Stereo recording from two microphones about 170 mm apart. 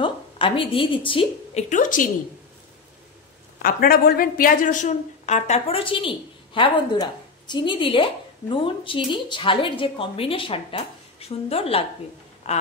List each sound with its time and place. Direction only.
0.0 s a woman's voice: 30° left (ahead or behind)
1.7 s a woman's voice: 50° left (ahead or behind)
3.6 s speech: 60° left (ahead or behind); by 12.6 s 40° left (ahead or behind)